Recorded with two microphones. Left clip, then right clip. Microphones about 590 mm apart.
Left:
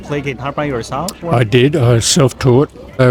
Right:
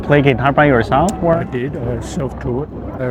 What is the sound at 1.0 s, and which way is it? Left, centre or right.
Speech, left.